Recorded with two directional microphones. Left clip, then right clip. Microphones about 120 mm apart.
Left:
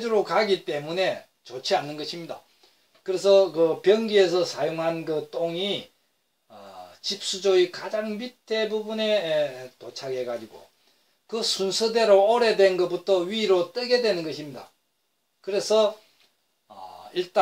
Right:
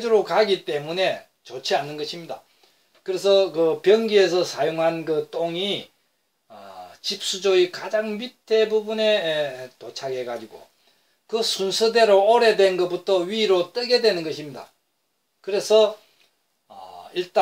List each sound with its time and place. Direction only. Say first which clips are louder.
0.0 s speech: right 4 dB; 20° left (ahead or behind)
3.0 s speech: even; 25° left (ahead or behind)
7.0 s speech: right 3 dB; 15° left (ahead or behind)
11.2 s speech: right 3 dB; 25° left (ahead or behind)
16.6 s a sound: right 2 dB; 30° left (ahead or behind)